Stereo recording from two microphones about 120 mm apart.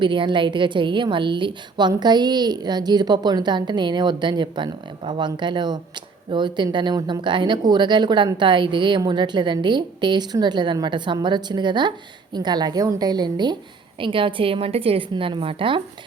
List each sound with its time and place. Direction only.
0.0 s a woman's voice: 40° right (ahead or behind)